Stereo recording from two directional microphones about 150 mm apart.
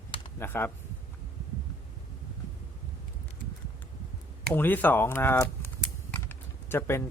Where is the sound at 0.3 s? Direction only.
15° left (ahead or behind).